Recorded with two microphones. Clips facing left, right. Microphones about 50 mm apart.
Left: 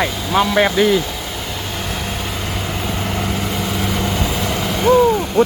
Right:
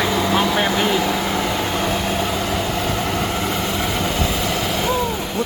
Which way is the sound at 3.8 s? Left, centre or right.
Centre.